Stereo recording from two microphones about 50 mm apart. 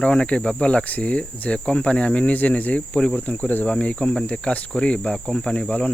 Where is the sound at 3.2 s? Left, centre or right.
Left.